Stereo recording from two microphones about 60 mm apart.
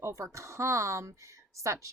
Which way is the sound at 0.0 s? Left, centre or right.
Right.